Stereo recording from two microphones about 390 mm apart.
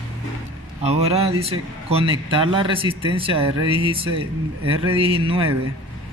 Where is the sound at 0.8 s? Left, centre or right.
Centre.